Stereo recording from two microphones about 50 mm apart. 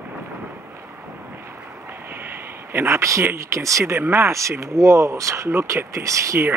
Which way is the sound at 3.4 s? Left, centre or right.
Right.